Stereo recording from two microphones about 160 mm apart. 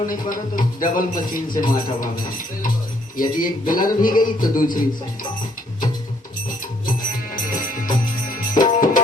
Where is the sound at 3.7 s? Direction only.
60° left (ahead or behind).